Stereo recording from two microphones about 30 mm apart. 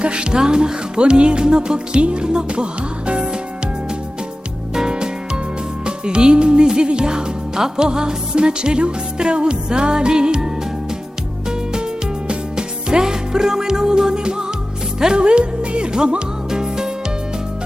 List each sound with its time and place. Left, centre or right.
0.0 s music: right
4.7 s music: right
15.2 s music: right